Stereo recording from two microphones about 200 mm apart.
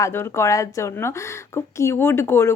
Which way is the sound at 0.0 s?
15° left (ahead or behind).